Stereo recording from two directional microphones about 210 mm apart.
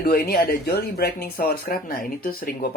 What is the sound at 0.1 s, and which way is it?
Speech, 45° left (ahead or behind).